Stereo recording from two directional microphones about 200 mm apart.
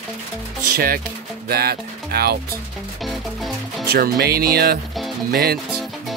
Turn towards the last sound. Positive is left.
turn(degrees=-50)  # may be behind; listen again after turning